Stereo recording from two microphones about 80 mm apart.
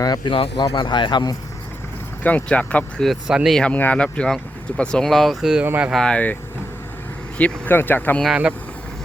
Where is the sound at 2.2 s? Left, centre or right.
Centre.